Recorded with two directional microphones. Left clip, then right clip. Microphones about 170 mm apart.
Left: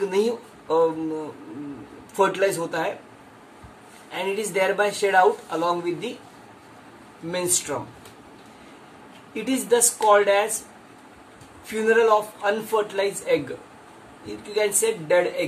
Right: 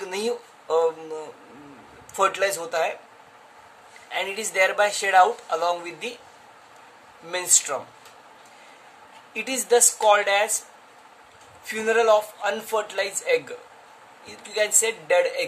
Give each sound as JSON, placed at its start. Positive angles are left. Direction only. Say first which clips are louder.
{"t": 0.0, "sound": "a sound", "louder": "left 6 dB", "side_deg": -40}
{"t": 2.1, "sound": "speech", "louder": "left 1 dB", "side_deg": -40}
{"t": 4.1, "sound": "speech", "louder": "left 2 dB", "side_deg": -40}
{"t": 7.2, "sound": "speech", "louder": "right 1 dB", "side_deg": -45}
{"t": 9.3, "sound": "speech", "louder": "right 1 dB", "side_deg": -40}
{"t": 11.6, "sound": "speech", "louder": "left 1 dB", "side_deg": -40}